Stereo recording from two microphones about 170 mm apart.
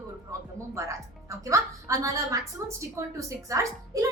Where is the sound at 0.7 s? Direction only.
20° right (ahead or behind).